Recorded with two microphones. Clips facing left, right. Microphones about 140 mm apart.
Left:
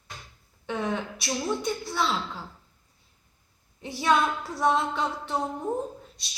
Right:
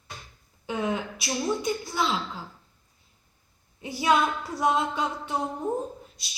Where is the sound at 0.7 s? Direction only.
5° right (ahead or behind).